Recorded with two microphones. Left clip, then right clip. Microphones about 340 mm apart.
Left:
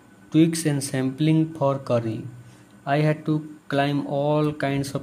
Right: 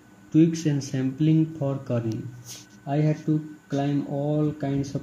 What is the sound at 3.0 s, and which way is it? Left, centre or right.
Speech, left.